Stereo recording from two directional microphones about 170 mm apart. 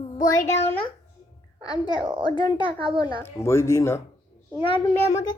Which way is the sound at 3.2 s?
15° left (ahead or behind).